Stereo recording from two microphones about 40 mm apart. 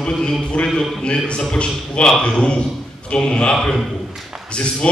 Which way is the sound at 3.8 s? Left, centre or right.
Centre.